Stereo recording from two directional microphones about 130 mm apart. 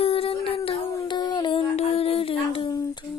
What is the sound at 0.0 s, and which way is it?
Humming, 45° left (ahead or behind).